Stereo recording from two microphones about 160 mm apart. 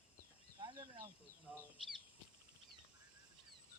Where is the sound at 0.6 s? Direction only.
30° right (ahead or behind).